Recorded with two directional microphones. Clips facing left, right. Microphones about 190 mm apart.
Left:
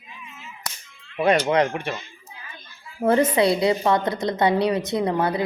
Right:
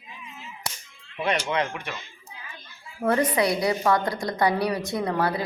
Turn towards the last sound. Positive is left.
turn(degrees=20)  # may be behind; listen again after turning